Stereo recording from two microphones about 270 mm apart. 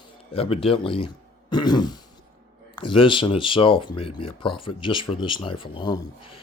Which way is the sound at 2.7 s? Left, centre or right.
Centre.